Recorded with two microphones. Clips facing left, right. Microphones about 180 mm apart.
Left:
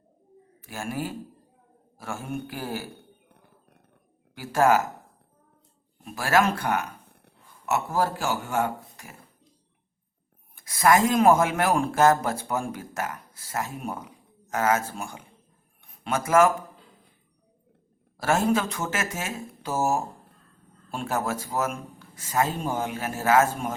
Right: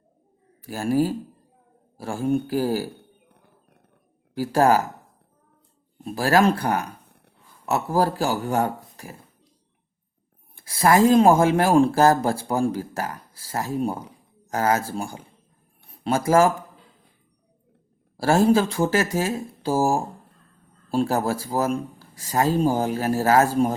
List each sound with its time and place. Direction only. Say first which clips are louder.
0.6 s speech: right 10 dB; 35° right (ahead or behind)
4.4 s speech: right 3 dB; 35° right (ahead or behind)
6.1 s speech: right 4 dB; 35° right (ahead or behind)
10.5 s speech: right 2 dB; 30° right (ahead or behind)
15.8 s a sound: right 5 dB; 35° right (ahead or behind)
18.2 s speech: right 5 dB; 30° right (ahead or behind)